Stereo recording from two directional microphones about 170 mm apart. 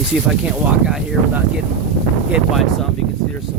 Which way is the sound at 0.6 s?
5° right (ahead or behind).